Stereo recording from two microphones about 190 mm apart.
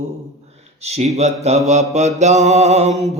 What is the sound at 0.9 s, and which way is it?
Mantra, 35° right (ahead or behind).